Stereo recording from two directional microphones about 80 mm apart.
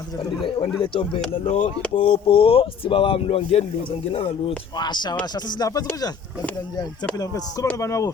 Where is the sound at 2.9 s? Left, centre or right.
Left.